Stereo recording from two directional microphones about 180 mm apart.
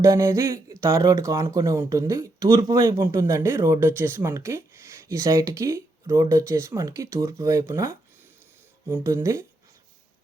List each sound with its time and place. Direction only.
0.0 s speech: 15° right (ahead or behind)